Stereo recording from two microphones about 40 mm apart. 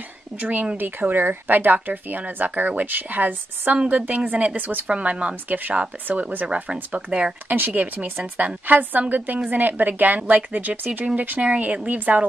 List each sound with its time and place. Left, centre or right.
0.4 s speech: right
0.7 s speech: right
4.8 s speech: right
5.3 s speech: right
6.4 s speech: right
7.4 s speech: right
11.4 s speech: right